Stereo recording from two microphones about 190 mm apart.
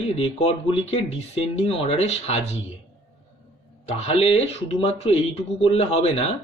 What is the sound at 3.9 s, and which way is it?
Speech, 35° left (ahead or behind).